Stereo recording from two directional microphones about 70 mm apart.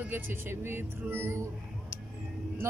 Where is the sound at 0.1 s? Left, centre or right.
Right.